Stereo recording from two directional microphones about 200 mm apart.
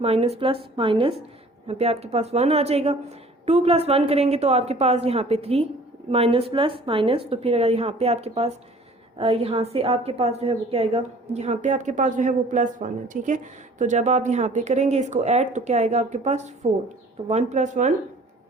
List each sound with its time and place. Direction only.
0.0 s a woman's voice: 30° right (ahead or behind)